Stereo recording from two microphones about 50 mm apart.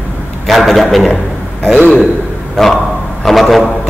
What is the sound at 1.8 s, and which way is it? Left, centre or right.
A man's voice, centre.